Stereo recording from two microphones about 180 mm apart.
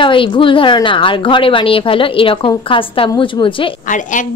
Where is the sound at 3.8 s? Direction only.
45° left (ahead or behind).